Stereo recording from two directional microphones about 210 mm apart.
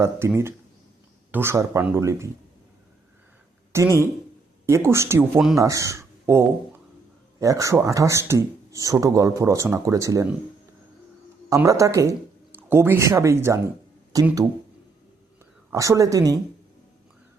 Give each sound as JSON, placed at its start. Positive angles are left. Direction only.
{"t": 0.0, "sound": "speech", "side_deg": -10}
{"t": 3.7, "sound": "a woman's voice", "side_deg": -15}
{"t": 11.4, "sound": "speech", "side_deg": -15}
{"t": 15.7, "sound": "speech", "side_deg": -15}